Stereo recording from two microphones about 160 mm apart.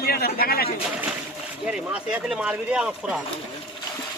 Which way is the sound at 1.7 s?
5° right (ahead or behind).